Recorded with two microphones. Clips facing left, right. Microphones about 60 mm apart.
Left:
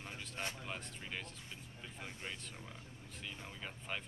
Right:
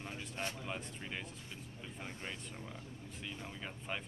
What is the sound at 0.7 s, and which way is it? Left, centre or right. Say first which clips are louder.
Speech: right 2 dB; centre.